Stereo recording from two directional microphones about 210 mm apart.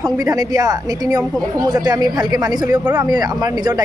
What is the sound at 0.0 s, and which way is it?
Speech, 15° right (ahead or behind).